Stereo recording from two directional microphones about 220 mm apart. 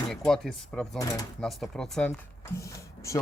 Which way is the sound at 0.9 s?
15° left (ahead or behind).